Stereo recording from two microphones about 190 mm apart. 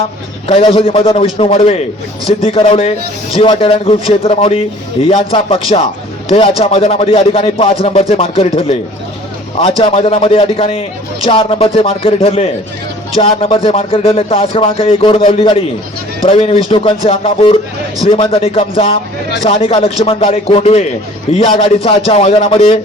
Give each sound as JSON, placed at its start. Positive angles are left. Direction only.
{"t": 0.4, "sound": "a man's voice", "side_deg": 30}